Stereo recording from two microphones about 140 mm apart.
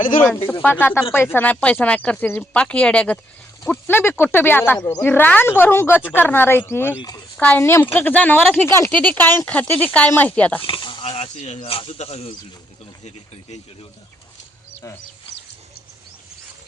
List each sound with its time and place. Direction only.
0.0 s speech: 70° left (ahead or behind)
0.6 s speech: 15° left (ahead or behind)
7.6 s speech: 20° left (ahead or behind)
10.6 s speech: 35° left (ahead or behind); by 11.6 s 50° left (ahead or behind)
11.6 s speech: 40° left (ahead or behind)
14.8 s speech: 20° left (ahead or behind)